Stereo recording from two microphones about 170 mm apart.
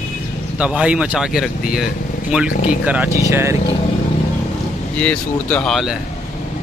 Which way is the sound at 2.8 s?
10° right (ahead or behind).